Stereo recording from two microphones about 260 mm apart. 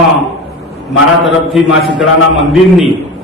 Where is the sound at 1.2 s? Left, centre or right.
Centre.